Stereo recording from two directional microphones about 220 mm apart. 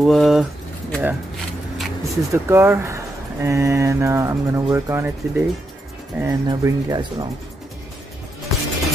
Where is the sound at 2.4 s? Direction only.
10° right (ahead or behind).